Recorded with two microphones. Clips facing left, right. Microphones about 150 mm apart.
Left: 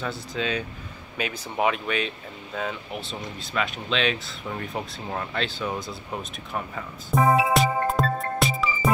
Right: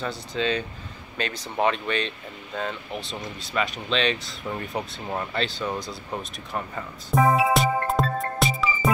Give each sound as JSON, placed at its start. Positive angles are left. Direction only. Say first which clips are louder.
{"t": 0.0, "sound": "speech", "louder": "right 2 dB", "side_deg": 5}
{"t": 6.5, "sound": "music", "louder": "right 1 dB", "side_deg": 0}